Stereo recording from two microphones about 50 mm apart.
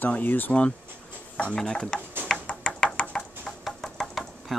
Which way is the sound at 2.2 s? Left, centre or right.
Centre.